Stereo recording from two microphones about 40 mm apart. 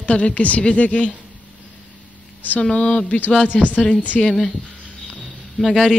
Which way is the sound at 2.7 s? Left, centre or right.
Left.